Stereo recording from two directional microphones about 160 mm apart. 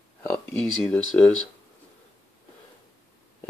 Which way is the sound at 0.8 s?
5° left (ahead or behind).